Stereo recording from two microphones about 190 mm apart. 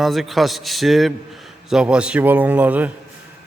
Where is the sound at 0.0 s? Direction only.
Centre (ahead or behind).